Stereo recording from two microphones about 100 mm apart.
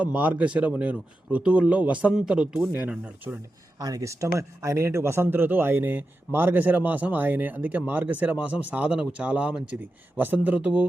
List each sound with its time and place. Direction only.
0.0 s speech: 15° right (ahead or behind)
3.8 s speech: 35° right (ahead or behind); by 10.8 s 15° right (ahead or behind)